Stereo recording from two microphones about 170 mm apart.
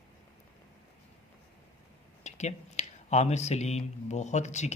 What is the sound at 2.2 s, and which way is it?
A man's voice, 40° left (ahead or behind).